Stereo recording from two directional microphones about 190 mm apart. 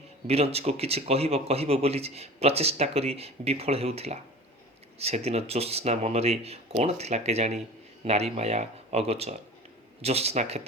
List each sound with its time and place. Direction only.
0.3 s a man's voice: 30° right (ahead or behind)